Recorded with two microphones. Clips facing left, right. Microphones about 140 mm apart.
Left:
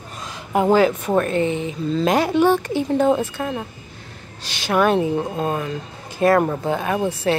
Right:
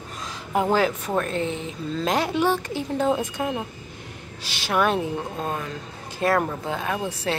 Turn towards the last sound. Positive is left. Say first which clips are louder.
# left 6 dB
turn(degrees=5)  # may be behind; listen again after turning